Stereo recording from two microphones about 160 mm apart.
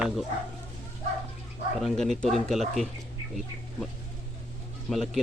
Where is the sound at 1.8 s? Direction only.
Centre (ahead or behind).